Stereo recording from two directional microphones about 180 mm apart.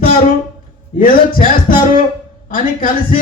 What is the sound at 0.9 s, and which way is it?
A man's voice, 50° left (ahead or behind).